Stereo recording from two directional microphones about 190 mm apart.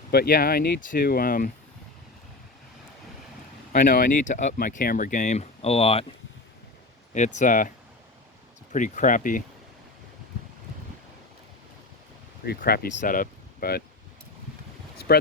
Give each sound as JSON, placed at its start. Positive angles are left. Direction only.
{"t": 0.1, "sound": "speech", "side_deg": 50}
{"t": 3.8, "sound": "speech", "side_deg": 45}
{"t": 7.3, "sound": "speech", "side_deg": 45}
{"t": 8.7, "sound": "speech", "side_deg": 40}
{"t": 12.5, "sound": "speech", "side_deg": 55}